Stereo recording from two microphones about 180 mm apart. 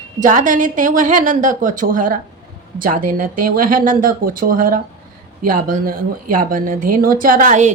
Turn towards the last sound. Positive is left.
turn(degrees=-45)  # may be behind; listen again after turning